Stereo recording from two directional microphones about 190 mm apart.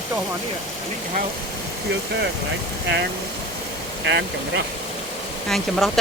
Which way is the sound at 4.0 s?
65° right (ahead or behind).